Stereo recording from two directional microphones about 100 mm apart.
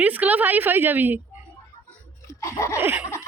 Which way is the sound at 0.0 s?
15° right (ahead or behind).